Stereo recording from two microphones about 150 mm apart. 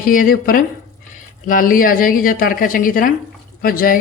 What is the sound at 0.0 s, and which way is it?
Speech, 70° left (ahead or behind).